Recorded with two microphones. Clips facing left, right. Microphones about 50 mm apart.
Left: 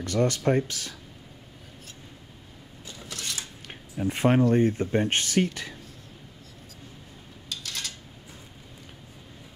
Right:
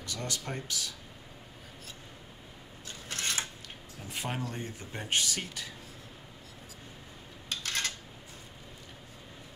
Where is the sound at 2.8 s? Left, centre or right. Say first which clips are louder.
Right 1 dB; right.